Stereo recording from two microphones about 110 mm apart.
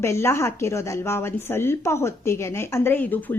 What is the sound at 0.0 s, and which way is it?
A woman's voice, 25° left (ahead or behind).